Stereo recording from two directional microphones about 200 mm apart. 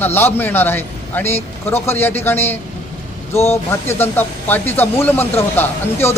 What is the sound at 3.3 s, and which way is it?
Speech, 30° left (ahead or behind).